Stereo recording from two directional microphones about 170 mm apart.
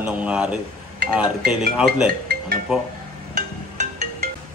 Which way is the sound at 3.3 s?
45° right (ahead or behind).